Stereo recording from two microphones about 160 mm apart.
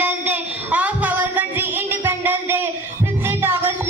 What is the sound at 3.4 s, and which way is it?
Music, 15° right (ahead or behind).